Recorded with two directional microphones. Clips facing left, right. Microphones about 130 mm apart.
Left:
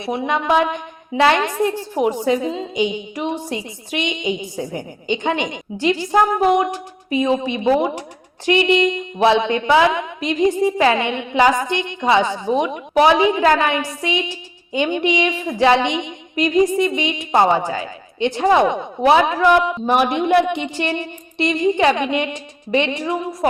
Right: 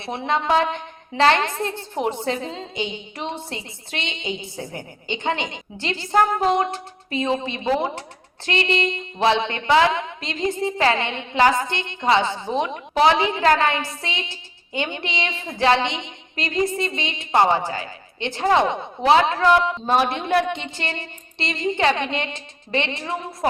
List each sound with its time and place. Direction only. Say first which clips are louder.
0.0 s a woman's voice: left 3 dB; 15° left (ahead or behind)